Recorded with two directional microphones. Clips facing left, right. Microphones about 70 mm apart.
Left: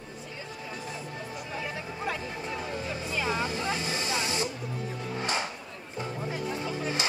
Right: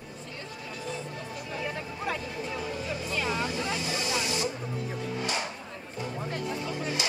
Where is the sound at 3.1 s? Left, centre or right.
Centre.